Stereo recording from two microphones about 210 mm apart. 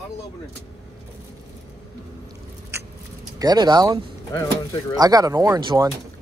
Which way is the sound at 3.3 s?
20° right (ahead or behind).